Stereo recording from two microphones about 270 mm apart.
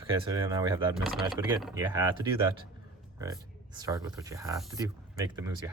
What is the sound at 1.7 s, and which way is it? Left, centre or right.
Speech, centre.